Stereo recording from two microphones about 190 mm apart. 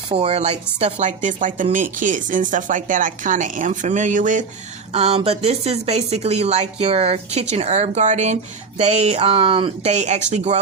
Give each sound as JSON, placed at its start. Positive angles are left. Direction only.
{"t": 0.1, "sound": "speech", "side_deg": -30}